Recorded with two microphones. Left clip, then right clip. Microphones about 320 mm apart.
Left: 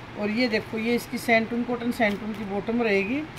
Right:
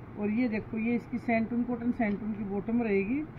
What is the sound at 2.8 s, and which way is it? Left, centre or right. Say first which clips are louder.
Speech: left 6 dB; centre.